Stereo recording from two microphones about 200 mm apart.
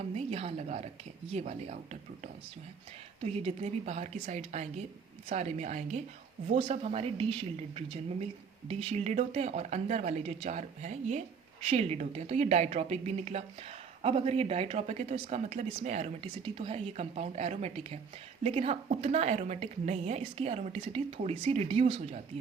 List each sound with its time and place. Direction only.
0.2 s a woman's voice: 30° right (ahead or behind)